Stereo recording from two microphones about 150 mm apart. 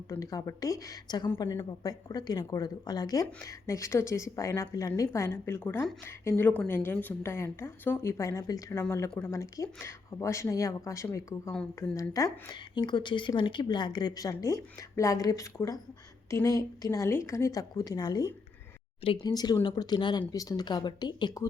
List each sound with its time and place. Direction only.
0.1 s a woman's voice: 25° left (ahead or behind)